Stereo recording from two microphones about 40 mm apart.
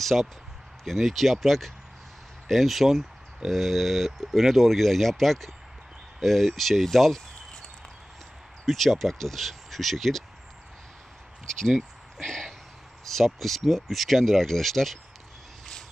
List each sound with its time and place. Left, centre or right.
0.0 s speech: centre
8.6 s speech: centre
11.4 s speech: centre
12.2 s a sound: centre
13.1 s speech: centre